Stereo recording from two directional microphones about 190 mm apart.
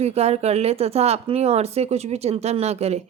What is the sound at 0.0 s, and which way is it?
Speech, 35° right (ahead or behind).